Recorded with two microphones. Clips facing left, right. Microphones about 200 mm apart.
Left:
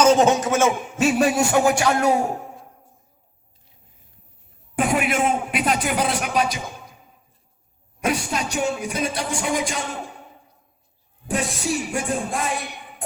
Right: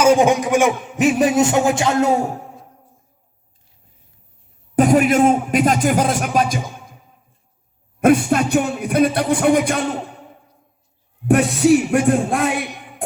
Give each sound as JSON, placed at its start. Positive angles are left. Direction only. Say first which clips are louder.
{"t": 0.0, "sound": "a man's voice", "louder": "right 2 dB", "side_deg": -10}
{"t": 4.7, "sound": "speech", "louder": "right 8 dB", "side_deg": -40}
{"t": 8.0, "sound": "music", "louder": "right 10 dB", "side_deg": -55}
{"t": 11.3, "sound": "music", "louder": "right 11 dB", "side_deg": -65}